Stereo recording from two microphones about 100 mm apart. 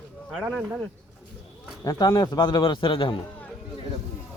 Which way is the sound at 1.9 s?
40° left (ahead or behind).